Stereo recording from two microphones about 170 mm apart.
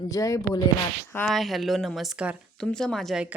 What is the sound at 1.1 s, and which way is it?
Speech, 5° left (ahead or behind).